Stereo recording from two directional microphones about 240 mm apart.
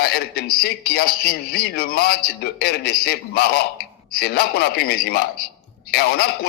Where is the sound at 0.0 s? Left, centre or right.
Left.